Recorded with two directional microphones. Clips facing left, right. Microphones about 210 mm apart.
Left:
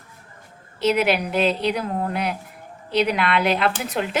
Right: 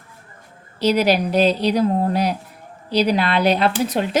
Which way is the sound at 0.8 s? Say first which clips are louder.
Right 3 dB; 35° right (ahead or behind).